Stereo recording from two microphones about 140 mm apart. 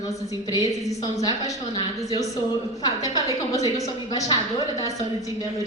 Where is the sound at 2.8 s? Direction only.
25° left (ahead or behind).